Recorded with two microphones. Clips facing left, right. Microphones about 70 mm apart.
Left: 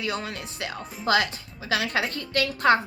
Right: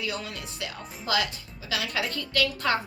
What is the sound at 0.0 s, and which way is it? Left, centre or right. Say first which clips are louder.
A woman's voice: left 3 dB; left.